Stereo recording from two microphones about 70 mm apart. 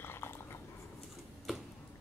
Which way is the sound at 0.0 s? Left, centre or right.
Left.